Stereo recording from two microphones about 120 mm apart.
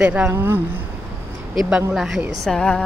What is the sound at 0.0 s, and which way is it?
Speech, 10° right (ahead or behind).